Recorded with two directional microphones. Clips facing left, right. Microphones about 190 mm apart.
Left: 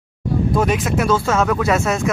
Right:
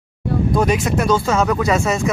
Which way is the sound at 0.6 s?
Centre (ahead or behind).